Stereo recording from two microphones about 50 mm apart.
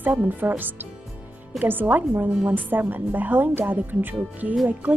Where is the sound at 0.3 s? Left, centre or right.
Right.